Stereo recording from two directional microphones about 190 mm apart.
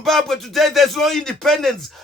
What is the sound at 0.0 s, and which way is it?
Speech, centre (ahead or behind).